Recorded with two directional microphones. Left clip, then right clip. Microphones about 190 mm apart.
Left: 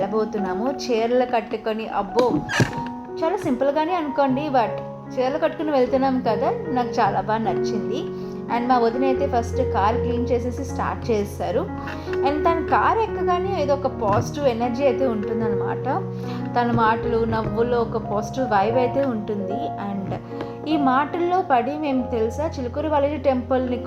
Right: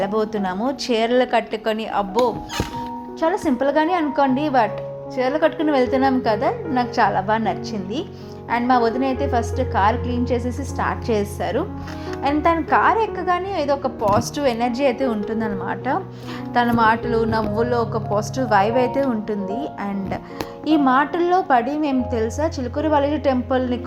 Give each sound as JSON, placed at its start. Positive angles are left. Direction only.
{"t": 0.0, "sound": "a woman's voice", "side_deg": -50}